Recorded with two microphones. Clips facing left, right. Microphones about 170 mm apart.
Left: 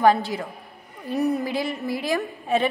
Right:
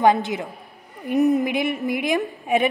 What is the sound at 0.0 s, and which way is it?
A woman's voice, 20° right (ahead or behind).